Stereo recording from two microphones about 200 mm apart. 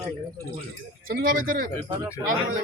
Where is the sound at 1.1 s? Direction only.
45° right (ahead or behind).